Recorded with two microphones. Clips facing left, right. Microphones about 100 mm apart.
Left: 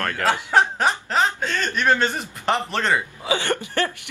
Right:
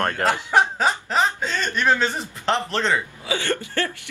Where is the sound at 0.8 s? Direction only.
Centre (ahead or behind).